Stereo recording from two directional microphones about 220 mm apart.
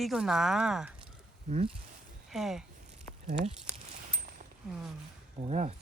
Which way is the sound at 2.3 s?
Centre (ahead or behind).